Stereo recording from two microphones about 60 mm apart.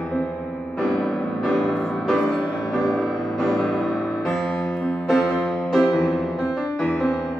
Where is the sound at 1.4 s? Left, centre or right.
Centre.